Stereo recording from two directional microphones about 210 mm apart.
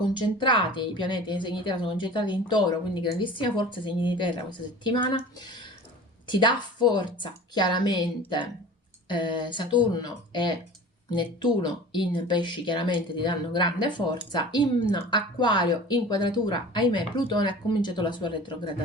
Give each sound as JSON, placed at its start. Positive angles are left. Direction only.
{"t": 0.0, "sound": "a woman's voice", "side_deg": 20}
{"t": 6.2, "sound": "a woman's voice", "side_deg": 20}